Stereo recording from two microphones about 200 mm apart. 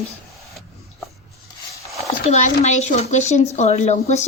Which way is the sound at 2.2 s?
35° left (ahead or behind).